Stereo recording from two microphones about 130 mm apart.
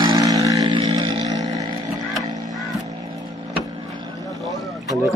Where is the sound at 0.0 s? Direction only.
30° right (ahead or behind).